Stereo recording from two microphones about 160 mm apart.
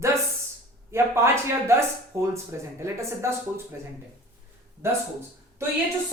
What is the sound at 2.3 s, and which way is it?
A woman's voice, 15° right (ahead or behind).